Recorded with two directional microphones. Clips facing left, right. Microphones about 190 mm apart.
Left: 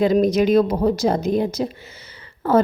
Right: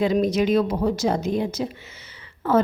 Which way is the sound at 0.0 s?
40° left (ahead or behind).